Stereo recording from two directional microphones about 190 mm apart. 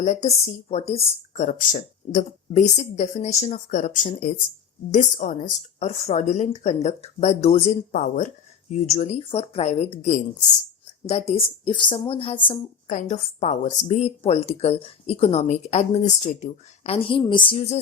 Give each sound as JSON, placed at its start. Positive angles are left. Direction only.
{"t": 0.0, "sound": "a woman's voice", "side_deg": 40}
{"t": 12.9, "sound": "a woman's voice", "side_deg": 40}